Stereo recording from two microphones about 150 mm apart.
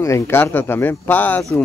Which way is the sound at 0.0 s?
15° left (ahead or behind).